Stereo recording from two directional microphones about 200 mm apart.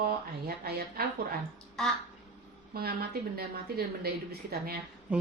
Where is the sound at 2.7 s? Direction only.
50° right (ahead or behind).